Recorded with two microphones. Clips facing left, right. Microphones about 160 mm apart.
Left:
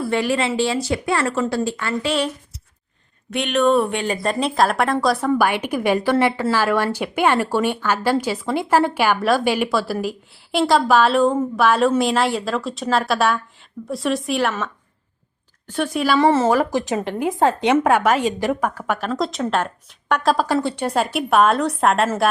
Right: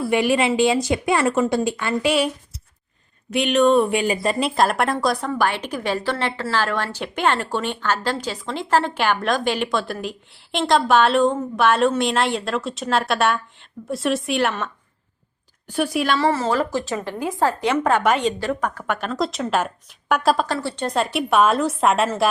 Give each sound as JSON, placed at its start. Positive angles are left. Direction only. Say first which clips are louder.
{"t": 0.1, "sound": "a woman's voice", "louder": "right 3 dB", "side_deg": -15}
{"t": 15.6, "sound": "speech", "louder": "right 1 dB", "side_deg": -10}
{"t": 16.2, "sound": "speech", "louder": "left 4 dB", "side_deg": 20}
{"t": 17.8, "sound": "a woman's voice", "louder": "left 2 dB", "side_deg": 5}
{"t": 20.6, "sound": "a woman's voice", "louder": "left 2 dB", "side_deg": 15}